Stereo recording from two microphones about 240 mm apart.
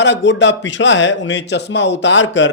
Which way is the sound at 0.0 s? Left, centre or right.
Left.